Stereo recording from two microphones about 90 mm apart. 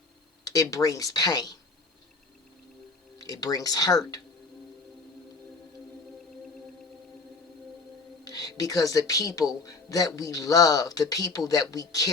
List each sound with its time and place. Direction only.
0.4 s speech: 40° left (ahead or behind)
3.2 s speech: 40° left (ahead or behind)
8.2 s speech: 45° left (ahead or behind)